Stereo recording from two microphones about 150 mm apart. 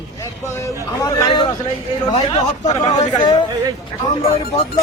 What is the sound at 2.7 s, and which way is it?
Speech, 25° left (ahead or behind).